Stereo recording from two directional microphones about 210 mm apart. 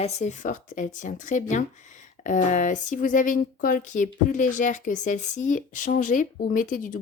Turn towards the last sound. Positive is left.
turn(degrees=40)  # may be behind; listen again after turning